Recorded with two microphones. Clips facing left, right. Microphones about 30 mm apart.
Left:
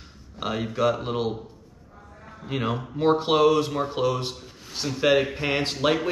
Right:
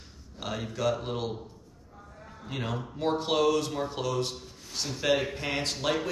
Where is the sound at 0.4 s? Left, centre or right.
Left.